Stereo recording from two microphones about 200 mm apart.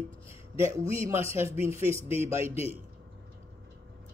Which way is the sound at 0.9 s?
15° right (ahead or behind).